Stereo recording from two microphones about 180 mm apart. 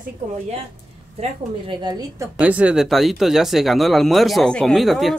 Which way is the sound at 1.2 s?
25° right (ahead or behind).